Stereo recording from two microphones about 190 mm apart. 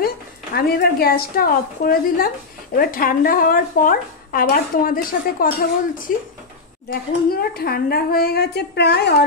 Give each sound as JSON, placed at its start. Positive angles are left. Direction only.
{"t": 0.6, "sound": "speech", "side_deg": 55}